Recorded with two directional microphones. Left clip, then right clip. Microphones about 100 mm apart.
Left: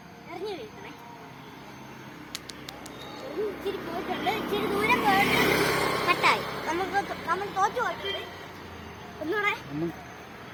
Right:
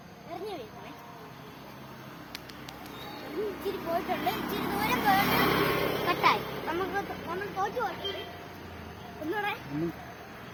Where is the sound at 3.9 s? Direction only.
40° right (ahead or behind).